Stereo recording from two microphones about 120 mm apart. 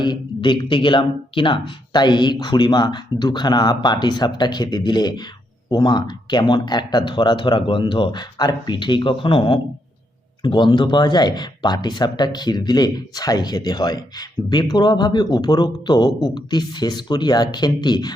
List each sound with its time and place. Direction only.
0.0 s speech: 40° left (ahead or behind)